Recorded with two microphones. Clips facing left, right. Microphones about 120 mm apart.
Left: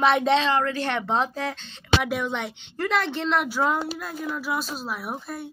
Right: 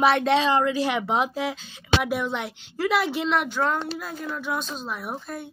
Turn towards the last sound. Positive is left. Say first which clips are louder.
# even
turn(degrees=5)  # may be behind; listen again after turning